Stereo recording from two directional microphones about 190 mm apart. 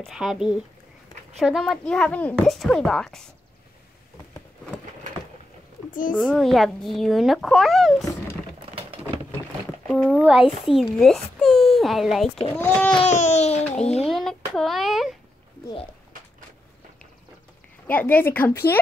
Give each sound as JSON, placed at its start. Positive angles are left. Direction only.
{"t": 0.0, "sound": "speech", "side_deg": 0}
{"t": 6.1, "sound": "speech", "side_deg": 5}
{"t": 8.7, "sound": "a sound", "side_deg": -30}
{"t": 9.8, "sound": "speech", "side_deg": 0}
{"t": 12.5, "sound": "speech", "side_deg": 10}
{"t": 12.9, "sound": "a sound", "side_deg": 35}
{"t": 13.7, "sound": "a child's voice", "side_deg": 5}
{"t": 17.8, "sound": "speech", "side_deg": 10}